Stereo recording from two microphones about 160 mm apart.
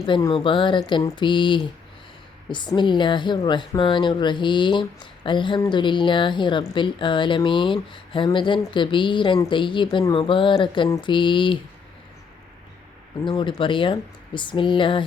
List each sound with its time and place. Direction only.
0.0 s a woman's voice: 25° left (ahead or behind)
13.2 s a woman's voice: 30° left (ahead or behind)